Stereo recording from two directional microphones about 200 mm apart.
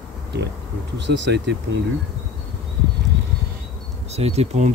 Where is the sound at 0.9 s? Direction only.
60° right (ahead or behind).